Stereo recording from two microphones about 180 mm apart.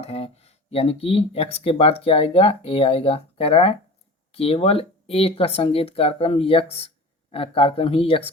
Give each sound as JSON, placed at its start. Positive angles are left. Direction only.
{"t": 0.0, "sound": "speech", "side_deg": 35}